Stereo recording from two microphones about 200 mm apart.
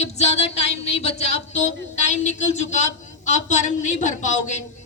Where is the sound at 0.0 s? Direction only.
30° left (ahead or behind).